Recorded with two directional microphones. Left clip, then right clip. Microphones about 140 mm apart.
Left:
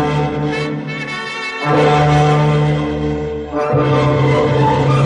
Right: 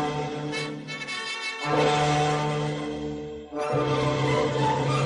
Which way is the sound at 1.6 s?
30° left (ahead or behind).